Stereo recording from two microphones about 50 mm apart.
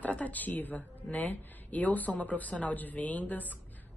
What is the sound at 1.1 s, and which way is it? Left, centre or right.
A woman's voice, left.